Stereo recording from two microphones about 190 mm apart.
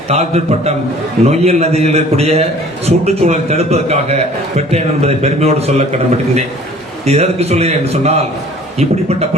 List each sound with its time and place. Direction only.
0.1 s a man's voice: 35° right (ahead or behind)
7.0 s a man's voice: 35° right (ahead or behind)